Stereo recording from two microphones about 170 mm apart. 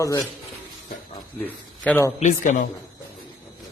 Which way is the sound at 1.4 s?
10° left (ahead or behind).